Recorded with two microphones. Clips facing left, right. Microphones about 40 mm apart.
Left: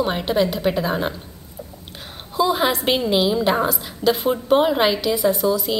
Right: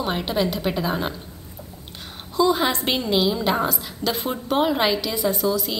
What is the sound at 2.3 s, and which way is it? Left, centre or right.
A woman's voice, centre.